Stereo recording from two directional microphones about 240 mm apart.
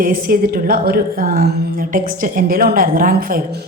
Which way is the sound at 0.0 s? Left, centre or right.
Right.